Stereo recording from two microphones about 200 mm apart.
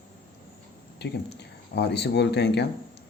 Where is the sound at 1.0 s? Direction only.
55° left (ahead or behind).